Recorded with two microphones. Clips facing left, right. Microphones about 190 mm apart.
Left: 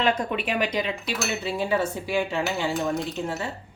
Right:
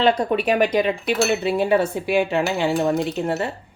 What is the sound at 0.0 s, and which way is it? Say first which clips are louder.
Speech: right 6 dB; 35° right (ahead or behind).